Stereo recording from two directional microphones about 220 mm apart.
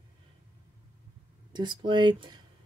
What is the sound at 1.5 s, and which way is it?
Speech, 20° right (ahead or behind).